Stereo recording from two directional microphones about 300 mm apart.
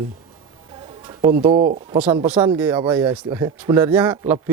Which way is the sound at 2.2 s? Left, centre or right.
Centre.